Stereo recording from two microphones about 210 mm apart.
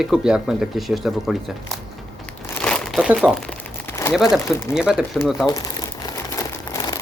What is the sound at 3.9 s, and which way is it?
Crumpling, 10° left (ahead or behind).